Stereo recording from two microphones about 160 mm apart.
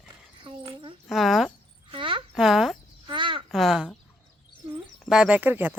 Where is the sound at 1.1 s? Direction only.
Centre (ahead or behind).